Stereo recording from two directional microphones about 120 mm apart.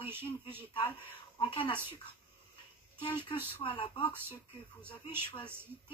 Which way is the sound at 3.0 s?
45° left (ahead or behind).